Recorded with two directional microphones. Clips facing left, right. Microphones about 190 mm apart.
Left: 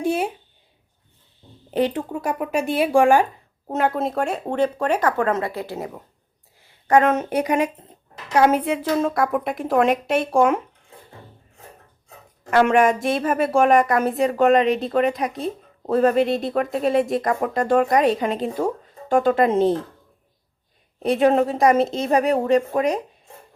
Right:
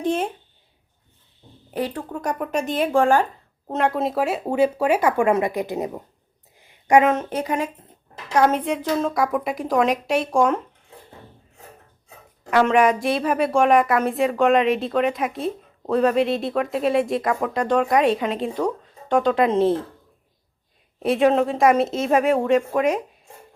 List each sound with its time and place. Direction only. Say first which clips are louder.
0.0 s speech: left 1 dB; 10° left (ahead or behind)
1.7 s speech: left 5 dB; 20° left (ahead or behind)
2.1 s speech: left 1 dB; 5° left (ahead or behind); by 6.0 s 20° right (ahead or behind)
6.6 s a sound: right 1 dB; 15° right (ahead or behind)
7.1 s speech: left 2 dB; 10° left (ahead or behind)
12.7 s speech: even; centre (ahead or behind)
21.0 s speech: left 1 dB; centre (ahead or behind)